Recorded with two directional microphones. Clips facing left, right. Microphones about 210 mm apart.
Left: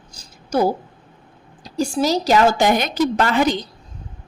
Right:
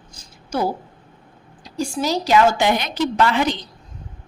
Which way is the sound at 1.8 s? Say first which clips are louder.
Left 3 dB; 40° left (ahead or behind).